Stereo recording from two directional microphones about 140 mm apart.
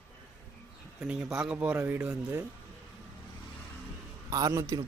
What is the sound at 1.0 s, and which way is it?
Speech, 5° right (ahead or behind).